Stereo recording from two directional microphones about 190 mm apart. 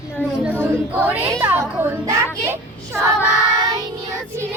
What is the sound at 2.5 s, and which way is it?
Speech, 15° right (ahead or behind).